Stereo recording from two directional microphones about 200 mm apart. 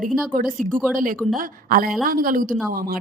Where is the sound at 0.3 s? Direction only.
45° right (ahead or behind).